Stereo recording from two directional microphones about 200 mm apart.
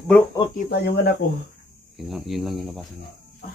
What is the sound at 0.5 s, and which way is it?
Speech, 50° left (ahead or behind).